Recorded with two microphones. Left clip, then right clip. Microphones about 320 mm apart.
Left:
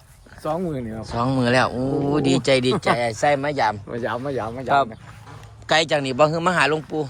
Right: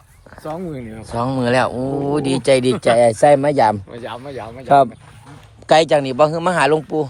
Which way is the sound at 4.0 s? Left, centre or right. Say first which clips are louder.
Left 4 dB; left.